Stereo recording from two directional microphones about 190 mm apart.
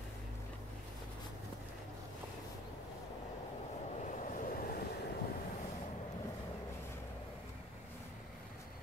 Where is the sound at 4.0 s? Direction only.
45° left (ahead or behind).